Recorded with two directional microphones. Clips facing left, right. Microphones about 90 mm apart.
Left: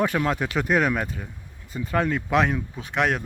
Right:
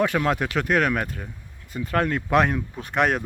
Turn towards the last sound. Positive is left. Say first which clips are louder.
# right 2 dB
turn(degrees=-10)  # may be behind; listen again after turning